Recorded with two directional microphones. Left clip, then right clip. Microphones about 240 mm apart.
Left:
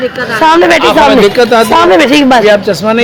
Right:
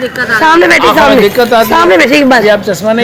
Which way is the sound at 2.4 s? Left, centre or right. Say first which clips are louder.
Left 1 dB; left.